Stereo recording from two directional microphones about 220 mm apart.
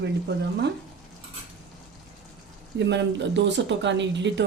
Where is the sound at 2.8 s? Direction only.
50° right (ahead or behind).